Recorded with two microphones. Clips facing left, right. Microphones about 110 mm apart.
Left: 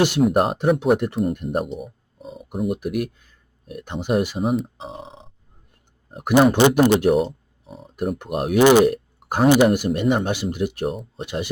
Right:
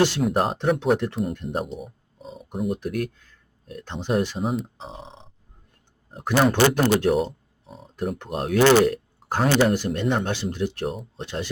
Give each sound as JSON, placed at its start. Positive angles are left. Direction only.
{"t": 0.2, "sound": "speech", "side_deg": 5}
{"t": 7.1, "sound": "a sound", "side_deg": 0}
{"t": 7.8, "sound": "speech", "side_deg": 15}